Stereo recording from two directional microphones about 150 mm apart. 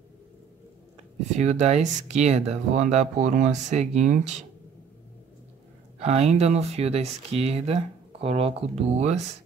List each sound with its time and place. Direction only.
1.4 s speech: 45° right (ahead or behind)
5.9 s speech: 45° right (ahead or behind)